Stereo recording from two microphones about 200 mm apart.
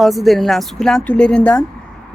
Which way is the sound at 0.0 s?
Centre (ahead or behind).